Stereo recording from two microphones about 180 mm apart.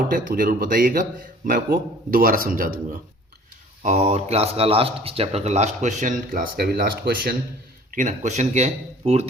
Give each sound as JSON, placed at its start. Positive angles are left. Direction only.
{"t": 0.1, "sound": "speech", "side_deg": -50}
{"t": 2.0, "sound": "speech", "side_deg": -50}
{"t": 3.8, "sound": "speech", "side_deg": -35}
{"t": 7.9, "sound": "speech", "side_deg": -45}